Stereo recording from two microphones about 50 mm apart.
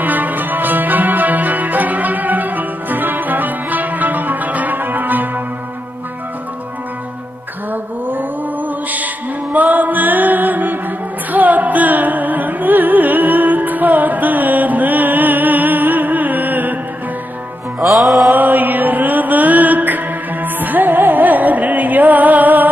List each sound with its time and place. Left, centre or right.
0.0 s music: right
7.7 s music: right
17.7 s music: centre
18.3 s music: right